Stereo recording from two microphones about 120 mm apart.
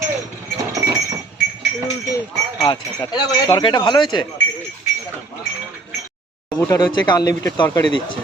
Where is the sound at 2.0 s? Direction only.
30° left (ahead or behind).